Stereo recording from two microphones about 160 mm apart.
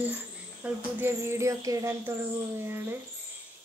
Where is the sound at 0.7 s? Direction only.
15° right (ahead or behind).